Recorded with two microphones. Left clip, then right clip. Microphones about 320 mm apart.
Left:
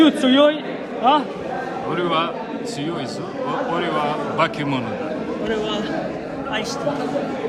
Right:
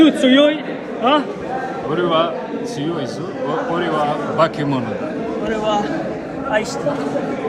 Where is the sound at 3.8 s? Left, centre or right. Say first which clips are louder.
Right 4 dB; centre.